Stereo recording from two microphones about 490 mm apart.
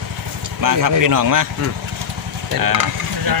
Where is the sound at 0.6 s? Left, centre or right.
Right.